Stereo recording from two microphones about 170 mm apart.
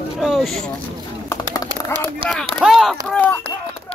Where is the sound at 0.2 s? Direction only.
Centre (ahead or behind).